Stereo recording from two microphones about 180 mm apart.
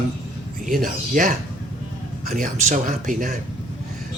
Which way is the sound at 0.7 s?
50° right (ahead or behind).